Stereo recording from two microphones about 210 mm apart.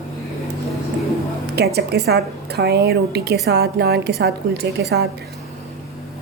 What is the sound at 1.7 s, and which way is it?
A woman's voice, 50° right (ahead or behind).